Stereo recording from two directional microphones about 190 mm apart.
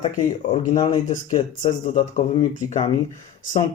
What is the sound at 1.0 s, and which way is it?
Speech, 40° left (ahead or behind).